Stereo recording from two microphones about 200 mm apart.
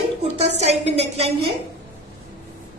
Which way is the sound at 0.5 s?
35° right (ahead or behind).